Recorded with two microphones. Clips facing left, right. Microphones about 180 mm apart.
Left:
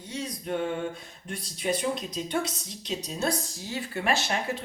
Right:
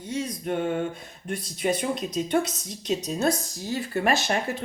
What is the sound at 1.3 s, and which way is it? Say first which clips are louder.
Speech: right 3 dB; 50° right (ahead or behind).